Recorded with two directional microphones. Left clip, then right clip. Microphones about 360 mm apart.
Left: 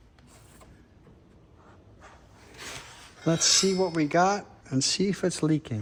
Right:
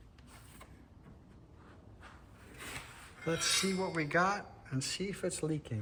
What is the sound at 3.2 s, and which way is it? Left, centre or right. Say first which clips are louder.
Speech: left 9 dB; centre.